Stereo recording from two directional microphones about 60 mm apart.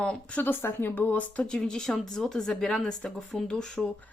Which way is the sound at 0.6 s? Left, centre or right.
Left.